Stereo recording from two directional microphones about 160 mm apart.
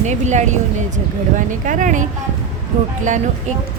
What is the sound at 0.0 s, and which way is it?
A woman's voice, 45° right (ahead or behind).